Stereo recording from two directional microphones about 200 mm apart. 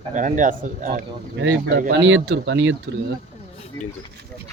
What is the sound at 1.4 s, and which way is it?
Speech, 60° right (ahead or behind).